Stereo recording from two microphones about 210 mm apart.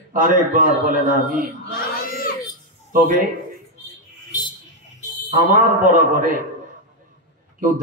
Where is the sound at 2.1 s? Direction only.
40° left (ahead or behind).